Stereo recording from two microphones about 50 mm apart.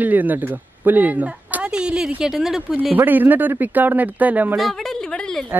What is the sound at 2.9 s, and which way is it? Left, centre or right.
A man's voice, right.